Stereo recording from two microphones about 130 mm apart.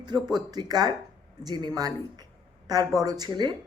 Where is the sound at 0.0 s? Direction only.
35° right (ahead or behind).